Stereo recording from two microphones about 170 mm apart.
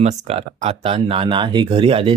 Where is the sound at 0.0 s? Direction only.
40° right (ahead or behind).